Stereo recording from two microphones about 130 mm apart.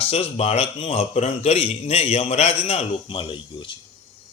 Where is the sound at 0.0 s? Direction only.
50° left (ahead or behind).